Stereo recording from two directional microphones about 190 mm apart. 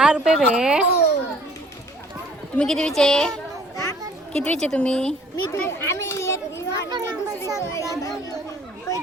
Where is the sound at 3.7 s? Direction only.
15° left (ahead or behind).